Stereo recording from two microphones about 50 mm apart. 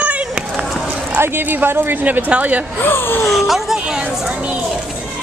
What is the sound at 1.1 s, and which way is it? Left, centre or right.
Speech, right.